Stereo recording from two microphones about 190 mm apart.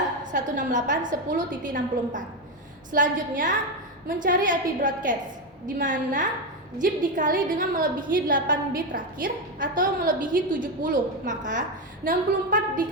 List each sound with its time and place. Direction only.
0.2 s a woman's voice: 40° right (ahead or behind)